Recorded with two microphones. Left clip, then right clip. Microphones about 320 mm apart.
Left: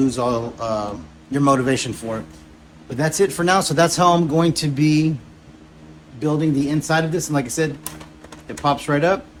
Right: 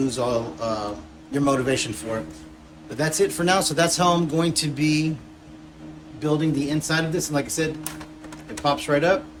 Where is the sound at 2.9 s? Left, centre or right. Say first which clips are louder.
Left 3 dB; left.